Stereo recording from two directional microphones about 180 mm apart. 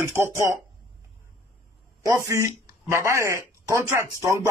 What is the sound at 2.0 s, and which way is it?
A man's voice, 15° right (ahead or behind).